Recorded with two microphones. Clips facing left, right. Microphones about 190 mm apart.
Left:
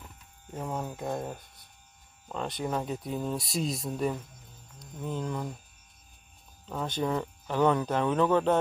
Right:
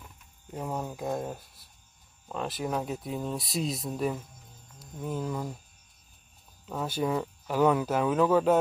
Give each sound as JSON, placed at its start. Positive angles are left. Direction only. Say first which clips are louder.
{"t": 0.6, "sound": "speech", "louder": "right 1 dB", "side_deg": 0}
{"t": 4.7, "sound": "music", "louder": "right 1 dB", "side_deg": -5}
{"t": 6.7, "sound": "speech", "louder": "right 1 dB", "side_deg": -5}